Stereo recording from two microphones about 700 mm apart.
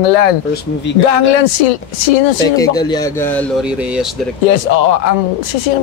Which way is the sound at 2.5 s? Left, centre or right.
Centre.